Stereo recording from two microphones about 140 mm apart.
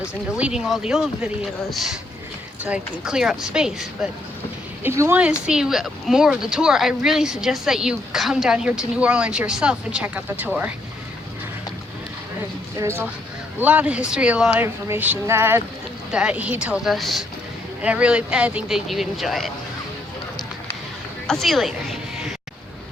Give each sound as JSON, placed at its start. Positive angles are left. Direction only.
{"t": 0.3, "sound": "speech", "side_deg": -5}
{"t": 4.8, "sound": "speech", "side_deg": -15}
{"t": 12.8, "sound": "speech", "side_deg": -20}
{"t": 16.1, "sound": "speech", "side_deg": -10}
{"t": 21.2, "sound": "speech", "side_deg": 0}